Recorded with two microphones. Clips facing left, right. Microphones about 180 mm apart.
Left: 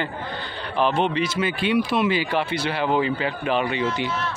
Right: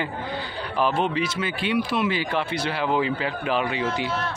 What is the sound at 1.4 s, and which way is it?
Speech, 20° left (ahead or behind).